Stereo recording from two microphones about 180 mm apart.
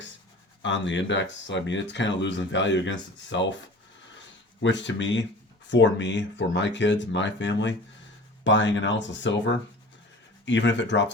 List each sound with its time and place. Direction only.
0.6 s speech: 90° left
4.6 s speech: 90° left